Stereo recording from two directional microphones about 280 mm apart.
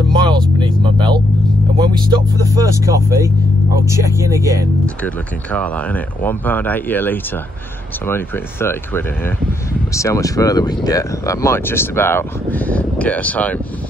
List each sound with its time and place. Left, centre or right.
0.1 s vehicle: centre
1.8 s speech: centre
4.8 s speech: centre